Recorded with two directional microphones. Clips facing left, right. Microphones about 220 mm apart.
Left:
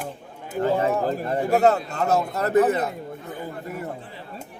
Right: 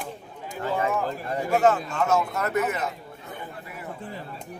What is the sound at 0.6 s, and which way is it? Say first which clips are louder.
Speech: left 5 dB; 35° left (ahead or behind).